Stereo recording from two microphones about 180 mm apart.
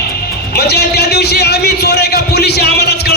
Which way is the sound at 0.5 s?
65° left (ahead or behind).